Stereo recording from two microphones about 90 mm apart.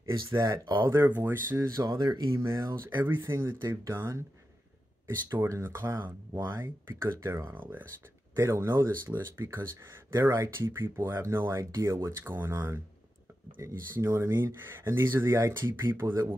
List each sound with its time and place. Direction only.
0.0 s speech: 35° right (ahead or behind)
1.8 s speech: 45° right (ahead or behind)
2.3 s speech: 30° right (ahead or behind)
7.4 s speech: 25° right (ahead or behind)